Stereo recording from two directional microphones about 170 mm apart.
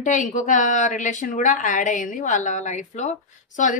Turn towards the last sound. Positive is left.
turn(degrees=45)  # may be behind; listen again after turning